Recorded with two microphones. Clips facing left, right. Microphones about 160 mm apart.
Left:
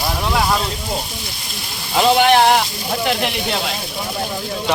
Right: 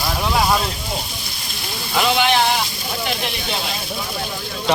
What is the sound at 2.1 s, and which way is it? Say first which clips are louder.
Speech: left 6 dB; 50° left (ahead or behind).